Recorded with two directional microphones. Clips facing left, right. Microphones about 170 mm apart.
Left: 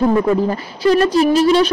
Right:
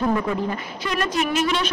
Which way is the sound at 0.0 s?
35° left (ahead or behind).